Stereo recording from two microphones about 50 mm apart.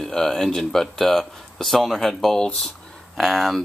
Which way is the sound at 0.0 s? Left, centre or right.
Centre.